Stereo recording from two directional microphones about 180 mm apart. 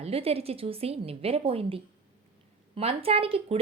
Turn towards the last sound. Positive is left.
turn(degrees=-30)  # may be behind; listen again after turning